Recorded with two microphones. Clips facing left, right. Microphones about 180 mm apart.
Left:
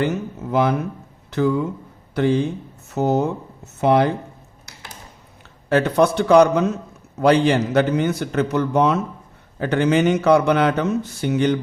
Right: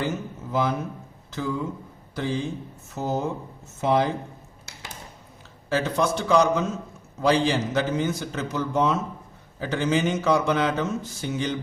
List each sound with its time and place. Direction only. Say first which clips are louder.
0.0 s speech: left 6 dB; 65° left (ahead or behind)
5.6 s speech: left 7 dB; 60° left (ahead or behind)